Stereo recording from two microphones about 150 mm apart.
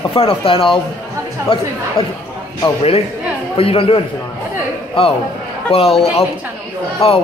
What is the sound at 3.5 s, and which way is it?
Speech, 40° left (ahead or behind).